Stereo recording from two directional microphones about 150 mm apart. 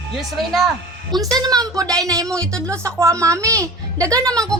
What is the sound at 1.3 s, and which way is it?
A woman's voice, 25° right (ahead or behind).